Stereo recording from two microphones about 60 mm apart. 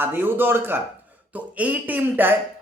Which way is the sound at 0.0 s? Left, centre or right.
Right.